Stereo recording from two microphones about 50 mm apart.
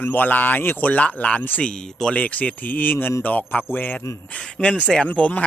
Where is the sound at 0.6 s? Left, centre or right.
Left.